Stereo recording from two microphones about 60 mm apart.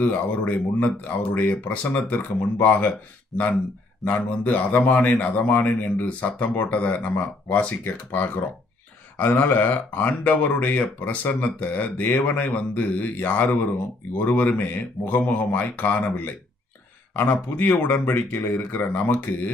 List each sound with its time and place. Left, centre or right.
0.0 s a man's voice: left
4.0 s a man's voice: left